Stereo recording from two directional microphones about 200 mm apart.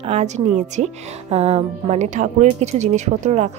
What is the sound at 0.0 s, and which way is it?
A woman's voice, 35° right (ahead or behind).